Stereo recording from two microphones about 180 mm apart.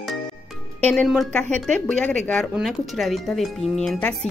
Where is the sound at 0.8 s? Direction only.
10° left (ahead or behind).